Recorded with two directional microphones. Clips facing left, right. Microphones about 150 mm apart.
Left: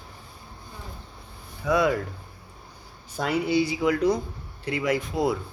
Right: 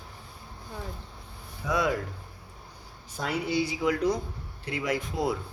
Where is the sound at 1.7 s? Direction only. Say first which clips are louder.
Left 5 dB; 65° left (ahead or behind).